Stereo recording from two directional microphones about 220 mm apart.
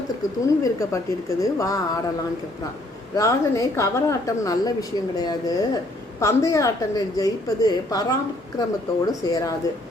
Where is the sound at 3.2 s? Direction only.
15° left (ahead or behind).